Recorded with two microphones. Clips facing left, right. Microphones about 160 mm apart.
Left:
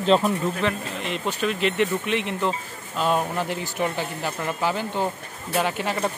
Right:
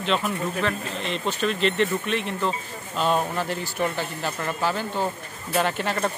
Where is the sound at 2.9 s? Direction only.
5° left (ahead or behind).